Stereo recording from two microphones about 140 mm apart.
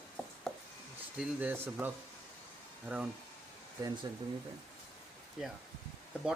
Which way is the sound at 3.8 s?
25° right (ahead or behind).